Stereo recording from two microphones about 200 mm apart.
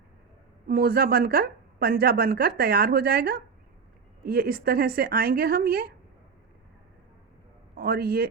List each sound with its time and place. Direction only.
0.7 s speech: 50° right (ahead or behind)
7.8 s speech: 50° right (ahead or behind)